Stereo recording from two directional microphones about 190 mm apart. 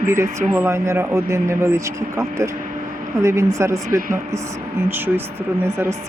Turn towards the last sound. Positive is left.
turn(degrees=-10)  # may be behind; listen again after turning